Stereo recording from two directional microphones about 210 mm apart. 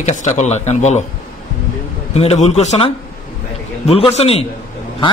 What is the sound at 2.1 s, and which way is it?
A man's voice, 30° left (ahead or behind).